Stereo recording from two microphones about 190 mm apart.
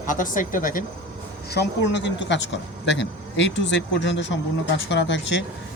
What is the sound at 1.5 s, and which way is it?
Speech, 60° left (ahead or behind).